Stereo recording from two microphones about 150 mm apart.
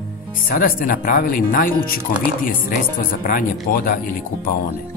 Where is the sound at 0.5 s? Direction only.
70° left (ahead or behind).